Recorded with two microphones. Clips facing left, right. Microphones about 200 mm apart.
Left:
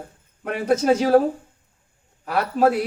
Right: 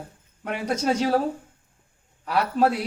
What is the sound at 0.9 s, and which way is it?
Speech, 5° left (ahead or behind).